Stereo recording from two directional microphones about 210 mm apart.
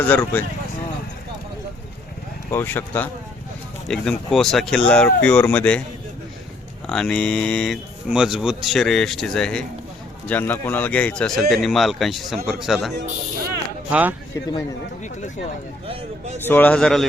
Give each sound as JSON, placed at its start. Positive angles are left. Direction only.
{"t": 0.0, "sound": "speech", "side_deg": 10}
{"t": 2.5, "sound": "speech", "side_deg": 10}
{"t": 6.8, "sound": "speech", "side_deg": 5}
{"t": 13.9, "sound": "speech", "side_deg": -10}
{"t": 15.9, "sound": "a man's voice", "side_deg": -30}
{"t": 16.4, "sound": "speech", "side_deg": 10}